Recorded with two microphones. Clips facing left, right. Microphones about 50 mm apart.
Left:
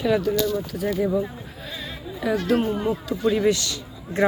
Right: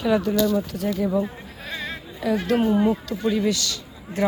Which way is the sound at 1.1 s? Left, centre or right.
Centre.